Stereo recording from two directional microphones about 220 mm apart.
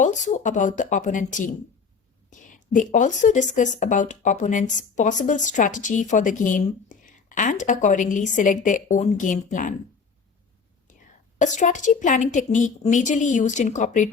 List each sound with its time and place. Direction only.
0.0 s speech: 35° left (ahead or behind)
11.3 s speech: 35° left (ahead or behind)